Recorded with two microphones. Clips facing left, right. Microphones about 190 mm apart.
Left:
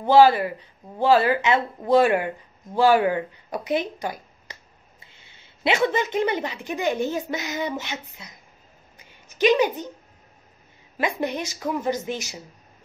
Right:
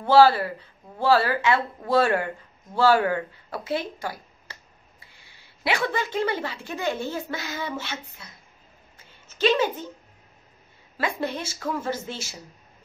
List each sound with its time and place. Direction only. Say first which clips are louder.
0.0 s speech: left 1 dB; 15° left (ahead or behind)
8.9 s a sound: left 4 dB; 15° left (ahead or behind)
11.0 s speech: left 2 dB; 15° left (ahead or behind)